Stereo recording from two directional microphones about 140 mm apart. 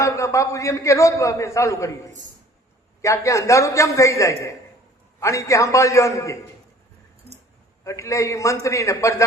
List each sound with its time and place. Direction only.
0.0 s a man's voice: 20° left (ahead or behind)
3.0 s a man's voice: 20° left (ahead or behind)
7.9 s a man's voice: 20° left (ahead or behind)